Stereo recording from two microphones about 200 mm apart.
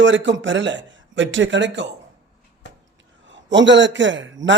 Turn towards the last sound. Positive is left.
turn(degrees=-65)  # may be behind; listen again after turning